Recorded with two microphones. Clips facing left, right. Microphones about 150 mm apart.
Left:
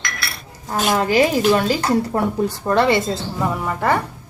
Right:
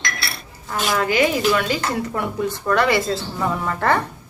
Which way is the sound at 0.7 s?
40° left (ahead or behind).